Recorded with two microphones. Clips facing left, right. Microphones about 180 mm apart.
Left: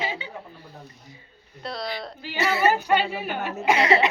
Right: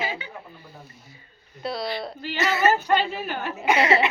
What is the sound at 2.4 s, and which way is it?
Speech, 30° left (ahead or behind).